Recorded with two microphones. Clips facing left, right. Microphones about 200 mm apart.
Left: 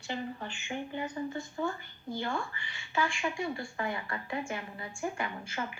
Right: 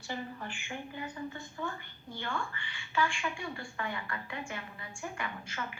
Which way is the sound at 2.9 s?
25° left (ahead or behind).